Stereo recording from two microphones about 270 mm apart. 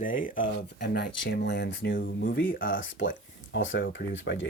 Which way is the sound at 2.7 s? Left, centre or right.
Left.